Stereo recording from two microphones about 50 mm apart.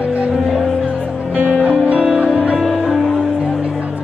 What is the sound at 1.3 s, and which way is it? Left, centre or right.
Music, right.